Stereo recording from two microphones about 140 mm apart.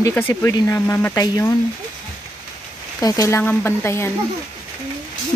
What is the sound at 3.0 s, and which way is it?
Speech, 25° left (ahead or behind).